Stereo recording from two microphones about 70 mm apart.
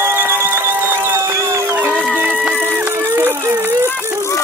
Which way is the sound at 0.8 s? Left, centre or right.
Right.